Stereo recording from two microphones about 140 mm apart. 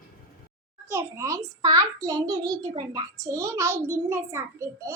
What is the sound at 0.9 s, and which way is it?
A child's voice, 20° right (ahead or behind).